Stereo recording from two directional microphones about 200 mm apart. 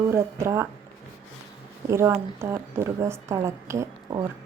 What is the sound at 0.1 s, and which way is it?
Speech, 15° right (ahead or behind).